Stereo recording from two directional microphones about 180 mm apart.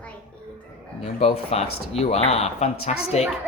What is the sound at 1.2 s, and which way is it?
Speech, 35° left (ahead or behind).